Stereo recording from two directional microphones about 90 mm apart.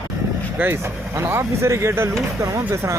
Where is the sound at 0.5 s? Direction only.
25° right (ahead or behind).